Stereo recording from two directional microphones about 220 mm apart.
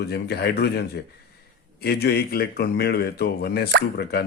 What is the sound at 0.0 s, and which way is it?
Speech, 50° left (ahead or behind).